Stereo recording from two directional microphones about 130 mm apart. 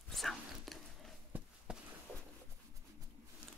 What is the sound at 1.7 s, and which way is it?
Walk, 5° right (ahead or behind).